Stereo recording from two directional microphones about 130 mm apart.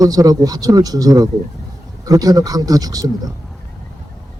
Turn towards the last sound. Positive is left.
turn(degrees=-30)  # may be behind; listen again after turning